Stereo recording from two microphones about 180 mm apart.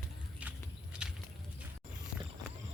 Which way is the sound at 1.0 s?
5° right (ahead or behind).